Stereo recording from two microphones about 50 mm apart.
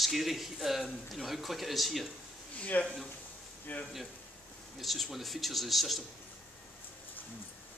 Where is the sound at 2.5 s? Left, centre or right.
Left.